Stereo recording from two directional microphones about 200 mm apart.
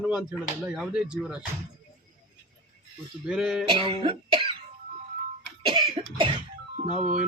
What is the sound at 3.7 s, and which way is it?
Cough, 25° right (ahead or behind).